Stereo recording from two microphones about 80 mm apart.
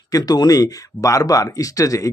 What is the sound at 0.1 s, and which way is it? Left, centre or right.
Speech, left.